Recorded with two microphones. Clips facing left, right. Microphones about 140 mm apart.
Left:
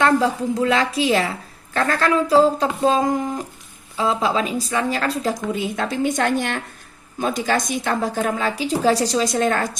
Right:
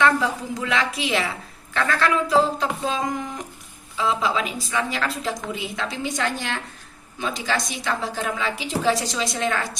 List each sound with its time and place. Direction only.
0.0 s a woman's voice: 35° left (ahead or behind)